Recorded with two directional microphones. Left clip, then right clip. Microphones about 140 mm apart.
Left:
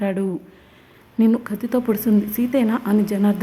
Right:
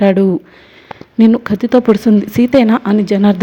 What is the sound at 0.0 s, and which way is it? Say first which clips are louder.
Speech: right 13 dB; 35° right (ahead or behind).